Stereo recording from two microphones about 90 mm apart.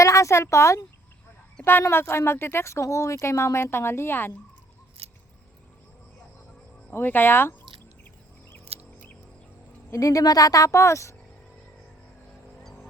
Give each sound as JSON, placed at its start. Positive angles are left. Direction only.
{"t": 0.0, "sound": "a woman's voice", "side_deg": 35}
{"t": 5.0, "sound": "a sound", "side_deg": -90}
{"t": 6.9, "sound": "speech", "side_deg": 20}
{"t": 9.9, "sound": "a woman's voice", "side_deg": 40}